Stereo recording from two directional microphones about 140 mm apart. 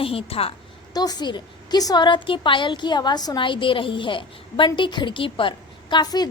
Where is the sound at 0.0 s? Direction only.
45° left (ahead or behind).